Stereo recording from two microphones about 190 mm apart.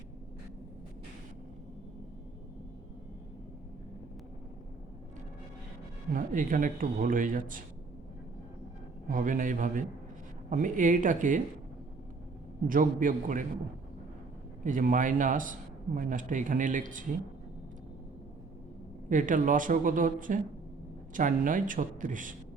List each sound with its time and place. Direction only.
6.1 s a man's voice: 45° right (ahead or behind)
9.0 s a man's voice: 45° right (ahead or behind)
12.6 s a man's voice: 45° right (ahead or behind)
14.6 s a man's voice: 45° right (ahead or behind)
19.0 s a man's voice: 45° right (ahead or behind)